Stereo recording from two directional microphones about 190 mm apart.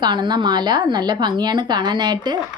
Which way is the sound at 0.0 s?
25° right (ahead or behind).